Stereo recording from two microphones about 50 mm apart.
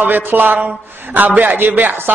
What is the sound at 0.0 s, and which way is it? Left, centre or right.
Mantra, right.